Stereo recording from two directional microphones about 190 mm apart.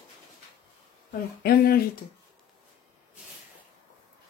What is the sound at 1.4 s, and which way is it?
Speech, 50° left (ahead or behind).